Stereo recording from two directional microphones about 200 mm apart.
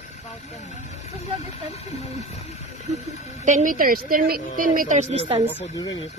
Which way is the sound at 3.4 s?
40° right (ahead or behind).